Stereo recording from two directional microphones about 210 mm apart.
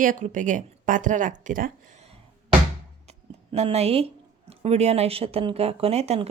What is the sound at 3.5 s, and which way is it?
Speech, 30° right (ahead or behind).